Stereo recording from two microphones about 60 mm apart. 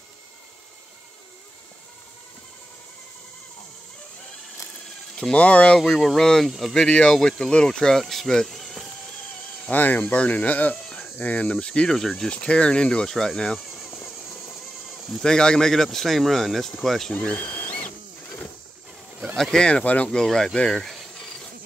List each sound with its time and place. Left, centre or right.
5.3 s speech: left
5.8 s speech: centre
9.7 s speech: left; by 13.6 s centre
14.3 s music: left
14.9 s speech: centre
17.4 s sewing machine: left
19.3 s speech: centre
20.2 s insect: centre